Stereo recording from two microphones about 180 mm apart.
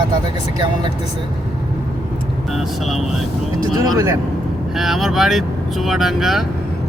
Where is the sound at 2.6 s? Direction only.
Centre (ahead or behind).